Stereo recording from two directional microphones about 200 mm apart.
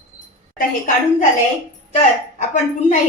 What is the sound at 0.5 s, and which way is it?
A woman's voice, 40° left (ahead or behind).